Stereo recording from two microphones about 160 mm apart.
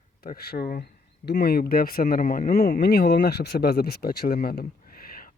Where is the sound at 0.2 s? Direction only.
75° left (ahead or behind); by 2.5 s 55° left (ahead or behind).